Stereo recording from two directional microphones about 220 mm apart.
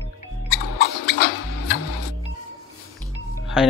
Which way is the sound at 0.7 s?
50° left (ahead or behind).